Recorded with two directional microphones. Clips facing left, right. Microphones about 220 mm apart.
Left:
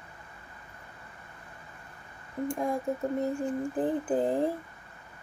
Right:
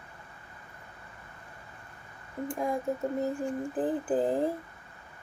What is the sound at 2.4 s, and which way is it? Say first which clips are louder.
Mantra: left 1 dB; centre (ahead or behind).